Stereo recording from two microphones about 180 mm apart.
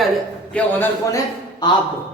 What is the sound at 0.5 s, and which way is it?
Speech, 10° left (ahead or behind).